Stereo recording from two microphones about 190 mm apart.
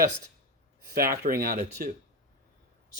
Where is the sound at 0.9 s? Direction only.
50° right (ahead or behind).